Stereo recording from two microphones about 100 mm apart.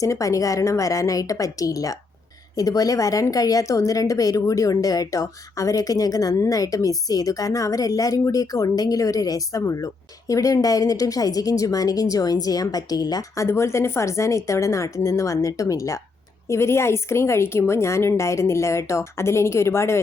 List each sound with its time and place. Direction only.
0.0 s a woman's voice: 35° left (ahead or behind)